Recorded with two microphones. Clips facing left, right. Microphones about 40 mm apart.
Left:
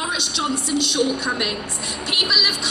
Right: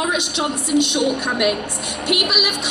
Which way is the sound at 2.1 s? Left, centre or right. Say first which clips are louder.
Right 2 dB; right.